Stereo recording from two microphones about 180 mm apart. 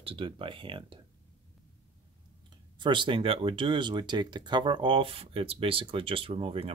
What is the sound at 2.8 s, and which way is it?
Speech, 25° right (ahead or behind).